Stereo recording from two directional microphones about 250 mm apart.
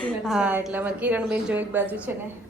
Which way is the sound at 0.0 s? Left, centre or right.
Centre.